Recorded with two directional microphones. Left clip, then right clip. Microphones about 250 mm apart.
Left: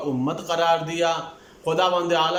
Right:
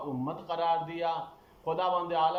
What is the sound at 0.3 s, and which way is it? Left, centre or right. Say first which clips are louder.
A man's voice: left 9 dB; left.